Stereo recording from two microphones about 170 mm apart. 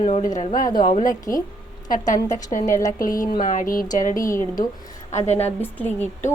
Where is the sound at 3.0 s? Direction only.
55° left (ahead or behind).